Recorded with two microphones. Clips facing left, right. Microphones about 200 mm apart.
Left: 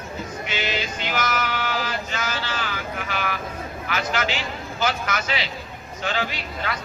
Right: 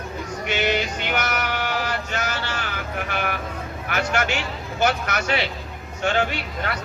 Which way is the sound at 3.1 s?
55° right (ahead or behind).